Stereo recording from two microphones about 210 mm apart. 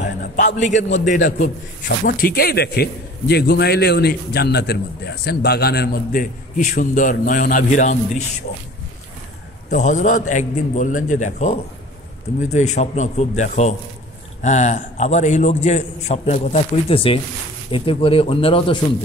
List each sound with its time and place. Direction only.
0.6 s a man's voice: 35° left (ahead or behind)
1.2 s a man's voice: 50° left (ahead or behind)
9.7 s a man's voice: 35° left (ahead or behind)